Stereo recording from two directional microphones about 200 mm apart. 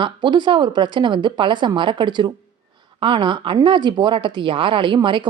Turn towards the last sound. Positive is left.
turn(degrees=-25)  # may be behind; listen again after turning